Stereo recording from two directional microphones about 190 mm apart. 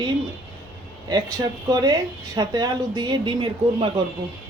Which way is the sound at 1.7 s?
20° right (ahead or behind).